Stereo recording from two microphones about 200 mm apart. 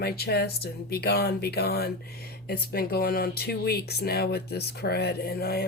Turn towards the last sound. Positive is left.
turn(degrees=50)  # may be behind; listen again after turning